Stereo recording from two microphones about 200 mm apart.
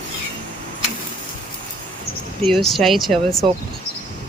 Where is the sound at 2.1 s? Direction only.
50° left (ahead or behind).